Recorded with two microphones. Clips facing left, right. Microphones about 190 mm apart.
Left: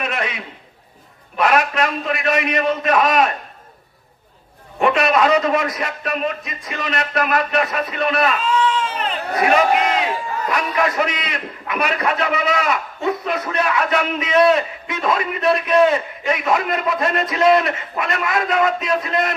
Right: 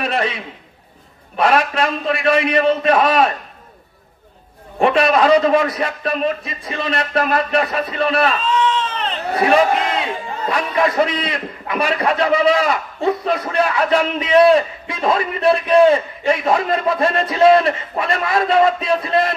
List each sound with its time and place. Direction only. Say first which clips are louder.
0.0 s a sound: right 4 dB; 30° right (ahead or behind)
1.3 s a man's voice: right 1 dB; 30° right (ahead or behind)
4.7 s a man's voice: right 2 dB; 30° right (ahead or behind)
8.4 s baby cry: right 1 dB; 10° left (ahead or behind)
9.3 s a man's voice: right 2 dB; 30° right (ahead or behind)